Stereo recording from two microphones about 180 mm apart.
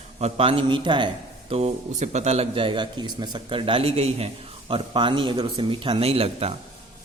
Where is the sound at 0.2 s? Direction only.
35° right (ahead or behind).